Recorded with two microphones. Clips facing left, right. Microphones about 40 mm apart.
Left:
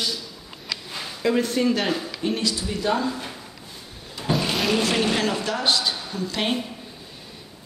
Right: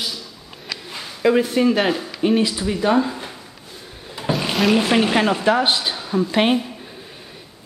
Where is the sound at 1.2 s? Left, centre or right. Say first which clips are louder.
Right 5 dB; centre.